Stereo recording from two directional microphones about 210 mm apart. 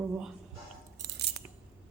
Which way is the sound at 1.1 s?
50° right (ahead or behind).